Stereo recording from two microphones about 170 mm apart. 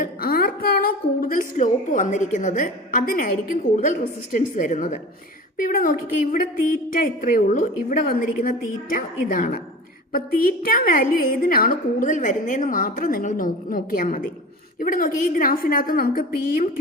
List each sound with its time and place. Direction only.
0.0 s a woman's voice: 60° left (ahead or behind)